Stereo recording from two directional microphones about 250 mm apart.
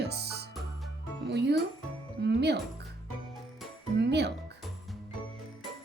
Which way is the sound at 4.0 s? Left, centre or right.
Right.